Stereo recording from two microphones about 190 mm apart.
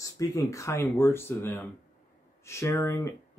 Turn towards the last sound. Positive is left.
turn(degrees=15)  # may be behind; listen again after turning